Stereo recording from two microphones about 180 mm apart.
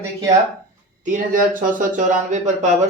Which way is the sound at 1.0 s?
45° right (ahead or behind).